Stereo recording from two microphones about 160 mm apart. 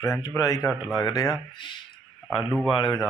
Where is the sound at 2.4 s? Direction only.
10° right (ahead or behind).